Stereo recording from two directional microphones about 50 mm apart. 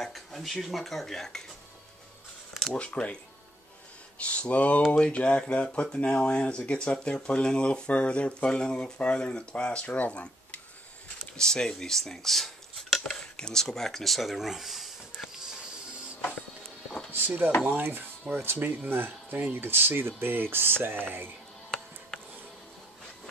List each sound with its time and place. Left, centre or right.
0.0 s dishes: centre
2.7 s speech: left
4.2 s speech: left
11.3 s speech: centre
17.1 s a sound: right
17.6 s speech: right
21.6 s music: centre